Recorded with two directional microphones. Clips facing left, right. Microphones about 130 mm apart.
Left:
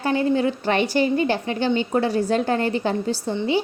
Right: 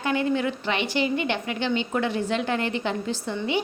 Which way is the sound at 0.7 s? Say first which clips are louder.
Left 5 dB; 45° left (ahead or behind).